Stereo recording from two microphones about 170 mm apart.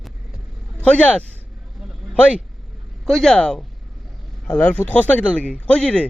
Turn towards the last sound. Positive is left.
turn(degrees=5)  # may be behind; listen again after turning